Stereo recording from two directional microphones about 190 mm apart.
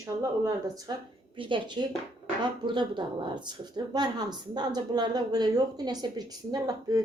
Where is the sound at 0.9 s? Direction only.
20° right (ahead or behind).